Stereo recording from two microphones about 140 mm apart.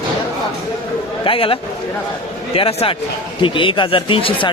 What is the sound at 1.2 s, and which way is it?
Speech, 40° left (ahead or behind).